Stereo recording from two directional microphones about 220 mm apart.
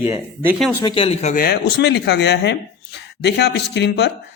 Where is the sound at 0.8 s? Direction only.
20° left (ahead or behind).